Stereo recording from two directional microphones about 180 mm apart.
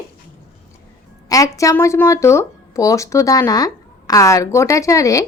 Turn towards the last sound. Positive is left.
turn(degrees=20)  # may be behind; listen again after turning